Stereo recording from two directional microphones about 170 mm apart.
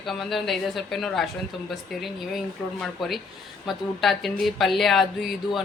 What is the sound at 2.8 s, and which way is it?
A woman's voice, centre (ahead or behind).